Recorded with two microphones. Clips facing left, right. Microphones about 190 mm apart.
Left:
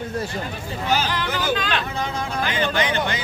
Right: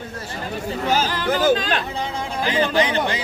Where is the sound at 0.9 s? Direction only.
45° right (ahead or behind).